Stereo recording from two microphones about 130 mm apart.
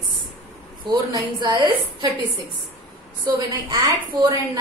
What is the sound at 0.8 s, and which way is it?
Speech, 35° right (ahead or behind).